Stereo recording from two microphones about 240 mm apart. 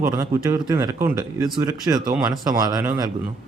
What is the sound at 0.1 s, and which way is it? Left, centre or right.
A man's voice, centre.